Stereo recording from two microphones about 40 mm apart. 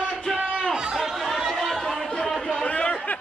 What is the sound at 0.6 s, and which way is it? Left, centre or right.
Chatter, centre.